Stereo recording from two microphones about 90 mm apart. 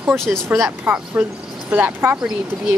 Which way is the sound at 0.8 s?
20° right (ahead or behind).